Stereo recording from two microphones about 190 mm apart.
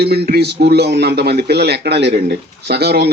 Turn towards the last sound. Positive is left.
turn(degrees=-60)  # may be behind; listen again after turning